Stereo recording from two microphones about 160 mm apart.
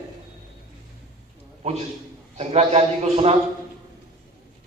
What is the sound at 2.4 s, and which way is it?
Speech, 40° right (ahead or behind).